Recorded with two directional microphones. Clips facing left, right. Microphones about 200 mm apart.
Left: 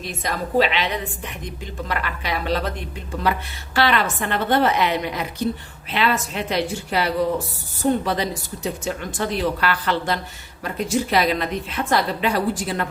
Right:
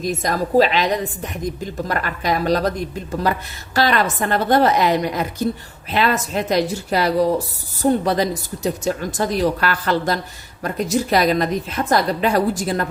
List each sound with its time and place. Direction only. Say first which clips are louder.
0.0 s a woman's voice: right 6 dB; 40° right (ahead or behind)